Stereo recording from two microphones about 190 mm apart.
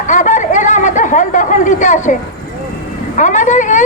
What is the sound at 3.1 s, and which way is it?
Vehicle, 40° left (ahead or behind).